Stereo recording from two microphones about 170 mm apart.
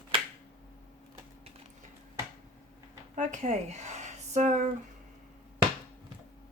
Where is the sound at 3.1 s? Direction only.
45° right (ahead or behind).